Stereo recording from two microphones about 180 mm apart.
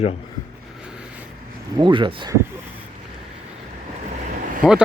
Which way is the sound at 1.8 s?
25° right (ahead or behind).